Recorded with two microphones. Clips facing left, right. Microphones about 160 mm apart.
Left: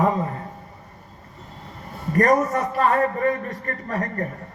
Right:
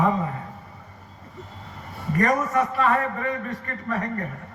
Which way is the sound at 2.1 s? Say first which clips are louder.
Left 3 dB; 40° left (ahead or behind).